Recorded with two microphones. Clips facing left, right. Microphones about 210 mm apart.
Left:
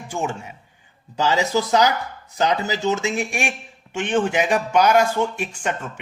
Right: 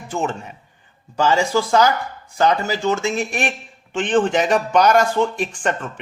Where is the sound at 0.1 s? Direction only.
10° left (ahead or behind).